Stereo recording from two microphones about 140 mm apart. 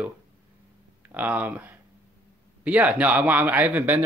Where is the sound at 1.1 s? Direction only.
10° right (ahead or behind).